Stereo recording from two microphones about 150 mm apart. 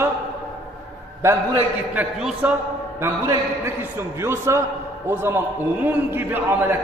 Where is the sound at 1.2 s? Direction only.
15° right (ahead or behind).